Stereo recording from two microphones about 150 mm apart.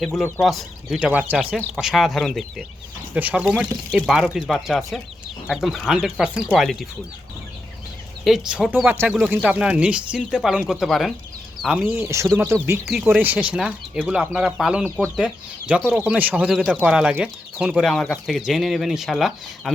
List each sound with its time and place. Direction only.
0.4 s speech: centre (ahead or behind)
1.5 s speech: centre (ahead or behind)
3.2 s speech: 10° right (ahead or behind)
3.4 s speech: centre (ahead or behind)
8.2 s speech: 5° right (ahead or behind)
11.9 s speech: 15° right (ahead or behind)